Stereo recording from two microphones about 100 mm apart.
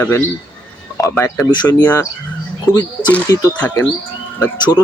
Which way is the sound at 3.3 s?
35° left (ahead or behind).